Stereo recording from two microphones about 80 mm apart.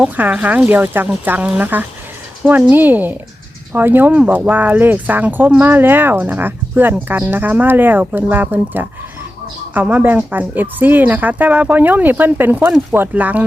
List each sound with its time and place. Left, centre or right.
0.0 s speech: centre